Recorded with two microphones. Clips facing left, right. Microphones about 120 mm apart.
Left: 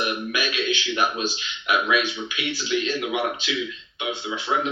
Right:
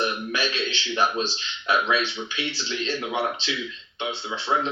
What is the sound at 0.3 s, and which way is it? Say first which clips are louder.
Speech: left 2 dB; 30° right (ahead or behind).